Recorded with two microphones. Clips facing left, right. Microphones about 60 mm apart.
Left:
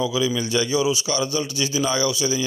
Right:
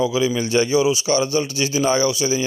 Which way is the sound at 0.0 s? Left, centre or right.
Right.